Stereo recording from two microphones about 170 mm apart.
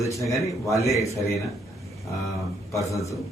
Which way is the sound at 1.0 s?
20° left (ahead or behind).